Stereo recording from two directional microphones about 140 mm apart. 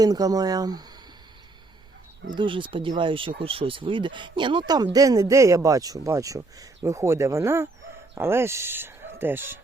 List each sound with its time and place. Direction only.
0.0 s speech: 25° right (ahead or behind)
2.4 s speech: 35° right (ahead or behind); by 9.6 s 15° right (ahead or behind)